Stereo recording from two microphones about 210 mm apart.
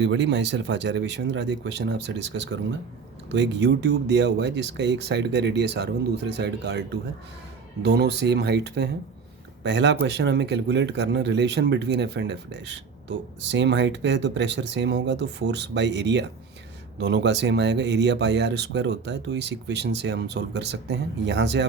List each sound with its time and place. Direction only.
0.0 s speech: 55° right (ahead or behind)